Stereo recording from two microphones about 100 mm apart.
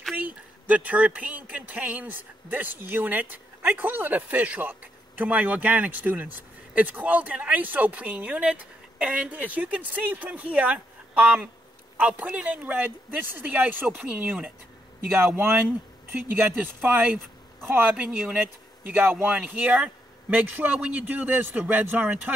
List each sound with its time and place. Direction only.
0.1 s speech: 15° right (ahead or behind)